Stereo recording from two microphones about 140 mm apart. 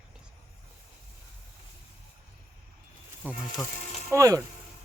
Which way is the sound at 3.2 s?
10° right (ahead or behind).